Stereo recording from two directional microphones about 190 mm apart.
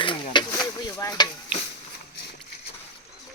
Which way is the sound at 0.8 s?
20° left (ahead or behind).